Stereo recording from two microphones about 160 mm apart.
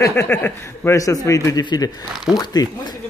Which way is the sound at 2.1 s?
Centre (ahead or behind).